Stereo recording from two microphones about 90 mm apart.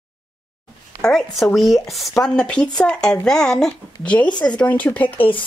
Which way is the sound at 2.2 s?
10° left (ahead or behind).